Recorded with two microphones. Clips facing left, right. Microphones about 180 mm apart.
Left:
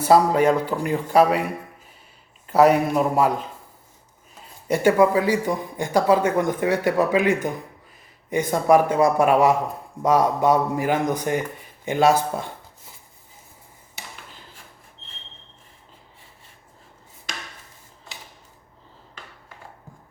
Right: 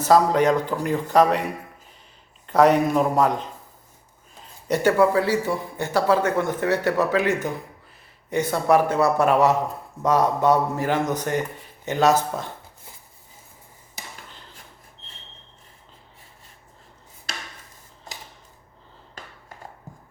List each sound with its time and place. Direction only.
0.0 s speech: 10° left (ahead or behind)
2.5 s speech: 10° left (ahead or behind)
4.7 s speech: 10° left (ahead or behind)
18.1 s a sound: 40° right (ahead or behind)